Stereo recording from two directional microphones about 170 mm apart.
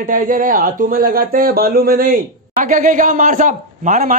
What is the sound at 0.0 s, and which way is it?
A man's voice, 55° right (ahead or behind).